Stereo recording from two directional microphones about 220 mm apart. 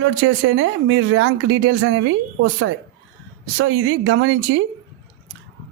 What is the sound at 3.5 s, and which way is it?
Speech, 60° right (ahead or behind).